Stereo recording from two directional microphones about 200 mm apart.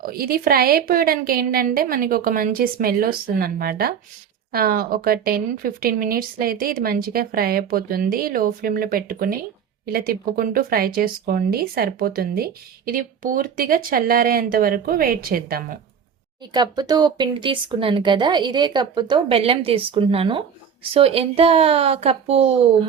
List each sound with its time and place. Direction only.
0.0 s speech: 45° right (ahead or behind)
16.5 s speech: 20° right (ahead or behind)